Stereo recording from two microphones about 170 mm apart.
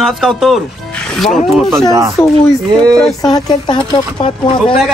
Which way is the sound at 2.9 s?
Centre (ahead or behind).